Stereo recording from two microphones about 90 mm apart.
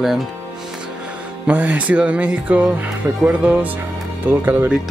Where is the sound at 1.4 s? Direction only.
15° right (ahead or behind).